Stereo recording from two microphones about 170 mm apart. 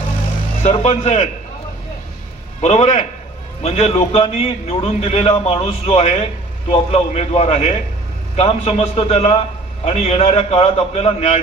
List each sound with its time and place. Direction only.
0.6 s a man's voice: 40° left (ahead or behind)
2.6 s a man's voice: 40° left (ahead or behind)